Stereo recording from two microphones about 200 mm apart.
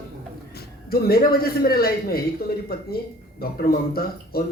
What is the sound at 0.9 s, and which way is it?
A man's voice, 50° left (ahead or behind).